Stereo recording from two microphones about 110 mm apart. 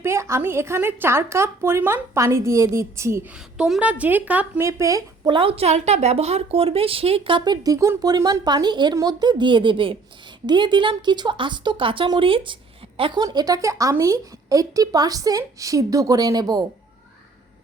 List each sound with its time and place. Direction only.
0.0 s a woman's voice: 25° right (ahead or behind)
3.2 s speech: 5° right (ahead or behind)
4.6 s a woman's voice: 30° right (ahead or behind)
5.3 s a woman's voice: 55° right (ahead or behind)
13.2 s a woman's voice: 35° right (ahead or behind)